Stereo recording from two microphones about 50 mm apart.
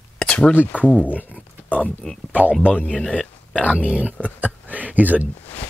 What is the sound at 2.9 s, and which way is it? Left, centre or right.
Speech, left.